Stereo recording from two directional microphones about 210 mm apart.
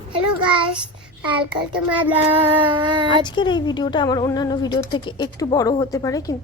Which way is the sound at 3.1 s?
20° left (ahead or behind).